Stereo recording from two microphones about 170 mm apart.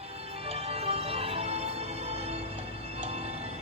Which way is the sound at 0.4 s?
35° right (ahead or behind).